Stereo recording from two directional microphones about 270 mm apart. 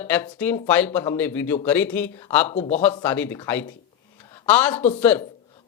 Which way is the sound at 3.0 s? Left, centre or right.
Centre.